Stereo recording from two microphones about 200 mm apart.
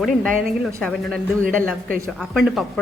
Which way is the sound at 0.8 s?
Centre (ahead or behind).